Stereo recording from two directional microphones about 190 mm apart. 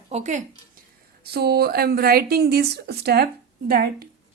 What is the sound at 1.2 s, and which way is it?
Speech, 55° right (ahead or behind).